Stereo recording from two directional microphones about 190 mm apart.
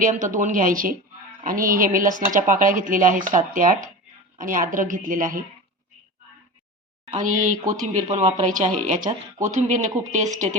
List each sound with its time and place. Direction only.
0.0 s speech: 45° right (ahead or behind)
7.1 s speech: 45° right (ahead or behind)